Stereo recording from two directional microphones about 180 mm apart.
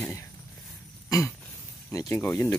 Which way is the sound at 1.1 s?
15° left (ahead or behind).